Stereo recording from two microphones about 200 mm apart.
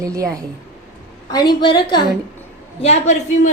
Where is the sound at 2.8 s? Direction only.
35° left (ahead or behind).